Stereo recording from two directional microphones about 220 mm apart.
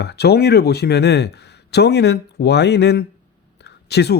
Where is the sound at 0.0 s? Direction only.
50° left (ahead or behind).